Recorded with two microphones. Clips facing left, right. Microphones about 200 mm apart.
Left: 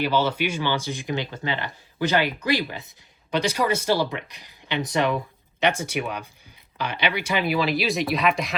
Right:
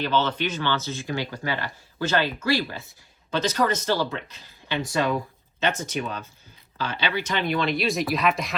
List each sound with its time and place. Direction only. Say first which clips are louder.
0.0 s speech: left 2 dB; 10° left (ahead or behind)